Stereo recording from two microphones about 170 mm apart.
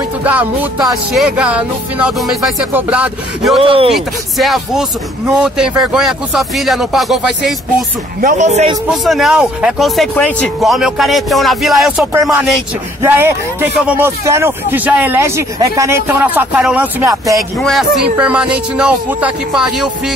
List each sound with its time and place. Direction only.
0.2 s a man's voice: 10° right (ahead or behind)
3.6 s speech: 30° right (ahead or behind)
3.9 s speech: centre (ahead or behind)
8.2 s speech: 45° right (ahead or behind)
8.9 s speech: centre (ahead or behind)
13.0 s a man's voice: 10° right (ahead or behind)
17.0 s speech: 20° right (ahead or behind)
17.6 s speech: centre (ahead or behind)